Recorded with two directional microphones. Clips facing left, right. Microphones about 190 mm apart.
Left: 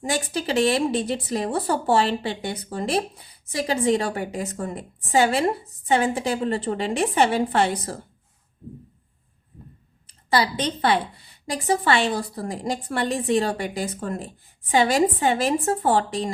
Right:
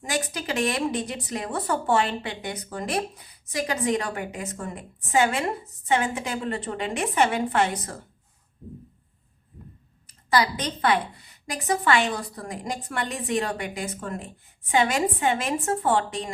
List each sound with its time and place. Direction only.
0.0 s speech: 30° left (ahead or behind)
10.1 s speech: 30° left (ahead or behind)